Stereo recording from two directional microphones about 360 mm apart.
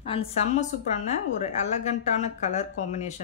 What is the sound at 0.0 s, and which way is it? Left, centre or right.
A woman's voice, centre.